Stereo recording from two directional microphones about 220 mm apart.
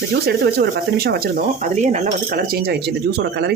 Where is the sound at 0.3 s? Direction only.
45° right (ahead or behind).